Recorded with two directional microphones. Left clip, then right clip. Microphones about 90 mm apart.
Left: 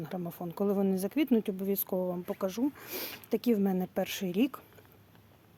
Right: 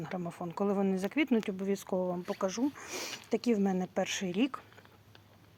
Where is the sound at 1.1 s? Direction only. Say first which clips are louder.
Left 2 dB; 55° left (ahead or behind).